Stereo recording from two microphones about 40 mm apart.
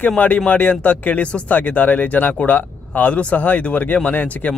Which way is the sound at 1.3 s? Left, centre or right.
Left.